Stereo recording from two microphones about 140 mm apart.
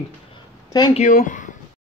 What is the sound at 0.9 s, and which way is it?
Speech, 65° left (ahead or behind).